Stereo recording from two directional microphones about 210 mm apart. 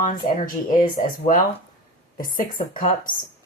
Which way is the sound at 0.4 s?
40° left (ahead or behind).